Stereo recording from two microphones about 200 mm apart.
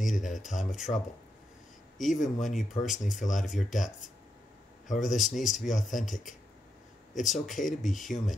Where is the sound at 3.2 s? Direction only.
40° left (ahead or behind).